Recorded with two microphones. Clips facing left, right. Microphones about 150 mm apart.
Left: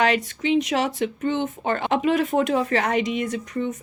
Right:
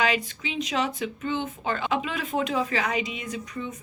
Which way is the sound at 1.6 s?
55° left (ahead or behind).